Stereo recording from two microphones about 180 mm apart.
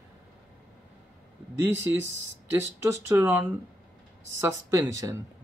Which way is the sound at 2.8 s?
10° right (ahead or behind).